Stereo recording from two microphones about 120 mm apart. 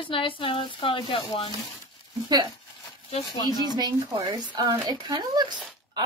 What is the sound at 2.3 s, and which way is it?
Speech, 35° right (ahead or behind).